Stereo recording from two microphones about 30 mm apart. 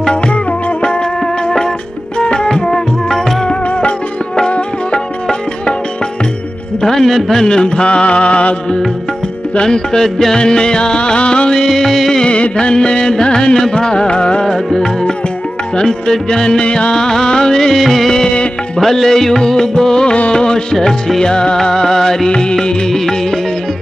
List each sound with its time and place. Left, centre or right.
1.2 s music: centre
2.1 s music: left
2.4 s music: left
4.5 s music: left
6.8 s music: centre
7.4 s music: left
9.6 s music: left
11.6 s music: centre
12.3 s music: left
14.4 s music: left
17.7 s music: centre; by 21.5 s left
21.5 s music: centre
22.3 s music: left
22.8 s music: centre